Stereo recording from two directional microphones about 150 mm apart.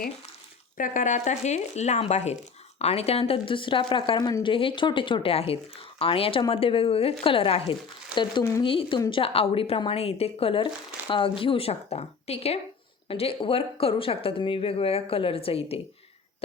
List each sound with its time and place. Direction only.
0.8 s a woman's voice: 60° left (ahead or behind); by 15.8 s 40° left (ahead or behind)